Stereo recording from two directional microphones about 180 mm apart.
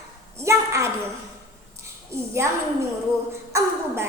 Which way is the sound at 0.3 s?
15° right (ahead or behind).